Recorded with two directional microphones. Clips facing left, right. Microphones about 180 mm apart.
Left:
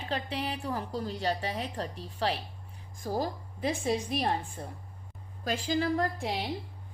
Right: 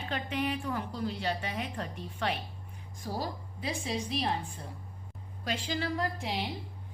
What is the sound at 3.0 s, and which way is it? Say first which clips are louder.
A woman's voice: left 4 dB; 45° left (ahead or behind).